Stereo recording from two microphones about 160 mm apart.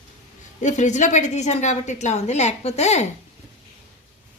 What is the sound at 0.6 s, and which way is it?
A woman's voice, 50° left (ahead or behind).